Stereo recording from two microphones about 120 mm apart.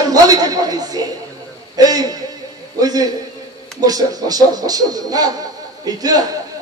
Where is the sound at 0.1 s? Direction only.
30° right (ahead or behind).